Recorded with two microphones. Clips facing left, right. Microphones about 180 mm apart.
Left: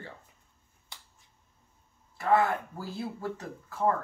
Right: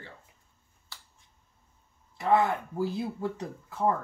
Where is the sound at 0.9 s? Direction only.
20° left (ahead or behind).